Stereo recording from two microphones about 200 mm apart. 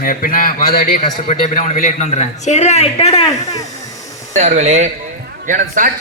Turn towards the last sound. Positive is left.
turn(degrees=-40)  # may be behind; listen again after turning